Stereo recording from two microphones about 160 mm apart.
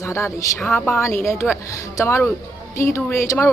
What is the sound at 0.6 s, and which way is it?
Speech, 5° left (ahead or behind).